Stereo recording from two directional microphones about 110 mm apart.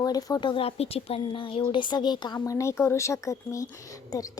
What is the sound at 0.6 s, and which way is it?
Speech, 65° left (ahead or behind).